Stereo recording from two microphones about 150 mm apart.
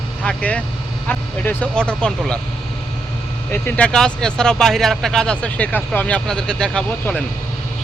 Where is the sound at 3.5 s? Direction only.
10° left (ahead or behind).